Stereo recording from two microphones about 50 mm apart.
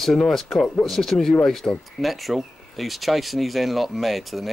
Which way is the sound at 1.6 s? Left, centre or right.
Left.